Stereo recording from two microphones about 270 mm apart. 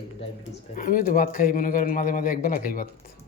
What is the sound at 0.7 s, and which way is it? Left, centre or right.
A man's voice, left.